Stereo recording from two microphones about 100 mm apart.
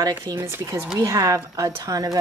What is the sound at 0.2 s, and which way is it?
Speech, 30° right (ahead or behind).